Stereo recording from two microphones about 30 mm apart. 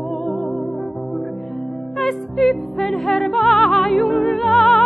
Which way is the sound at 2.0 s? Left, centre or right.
Centre.